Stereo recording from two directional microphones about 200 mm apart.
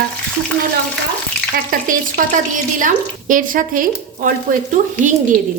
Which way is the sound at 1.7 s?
45° right (ahead or behind).